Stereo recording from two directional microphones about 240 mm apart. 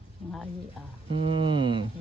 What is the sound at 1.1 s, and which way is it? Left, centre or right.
Speech, right.